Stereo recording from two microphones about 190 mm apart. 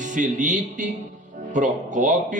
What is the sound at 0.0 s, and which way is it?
Speech, 40° right (ahead or behind).